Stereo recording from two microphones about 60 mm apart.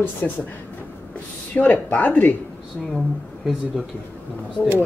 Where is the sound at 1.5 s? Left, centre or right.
Left.